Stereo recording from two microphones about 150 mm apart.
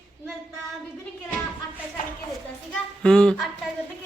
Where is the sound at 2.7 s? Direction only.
5° left (ahead or behind).